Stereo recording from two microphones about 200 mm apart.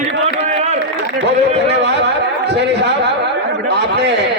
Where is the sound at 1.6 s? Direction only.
60° right (ahead or behind).